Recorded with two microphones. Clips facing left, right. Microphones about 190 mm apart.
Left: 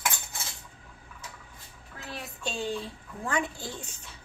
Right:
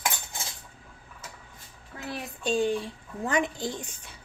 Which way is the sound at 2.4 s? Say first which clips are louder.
Right 7 dB; 15° right (ahead or behind).